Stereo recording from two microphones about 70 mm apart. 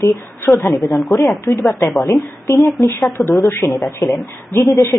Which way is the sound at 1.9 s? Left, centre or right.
Centre.